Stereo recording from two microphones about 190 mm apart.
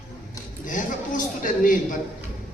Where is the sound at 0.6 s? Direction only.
45° left (ahead or behind).